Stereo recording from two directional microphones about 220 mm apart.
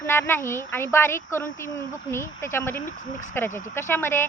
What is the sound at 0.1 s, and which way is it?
A woman's voice, 10° left (ahead or behind).